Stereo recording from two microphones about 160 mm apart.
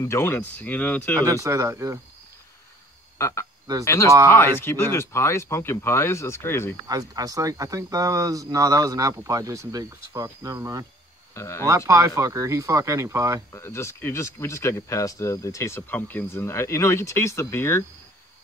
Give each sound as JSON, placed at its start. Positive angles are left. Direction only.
{"t": 0.0, "sound": "speech", "side_deg": 15}
{"t": 1.2, "sound": "speech", "side_deg": -20}
{"t": 3.2, "sound": "speech", "side_deg": 20}
{"t": 6.9, "sound": "speech", "side_deg": -20}
{"t": 11.3, "sound": "speech", "side_deg": 20}
{"t": 11.6, "sound": "speech", "side_deg": -20}
{"t": 13.5, "sound": "speech", "side_deg": 15}